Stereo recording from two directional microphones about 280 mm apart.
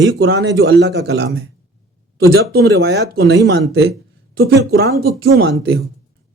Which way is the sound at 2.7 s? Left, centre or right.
Right.